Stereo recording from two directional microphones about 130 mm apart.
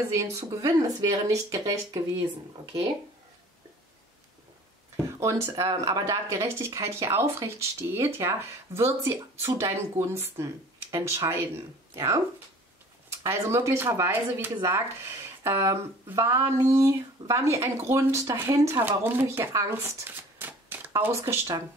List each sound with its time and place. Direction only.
0.1 s speech: 25° right (ahead or behind)
5.0 s speech: 25° right (ahead or behind)
13.2 s speech: 20° right (ahead or behind)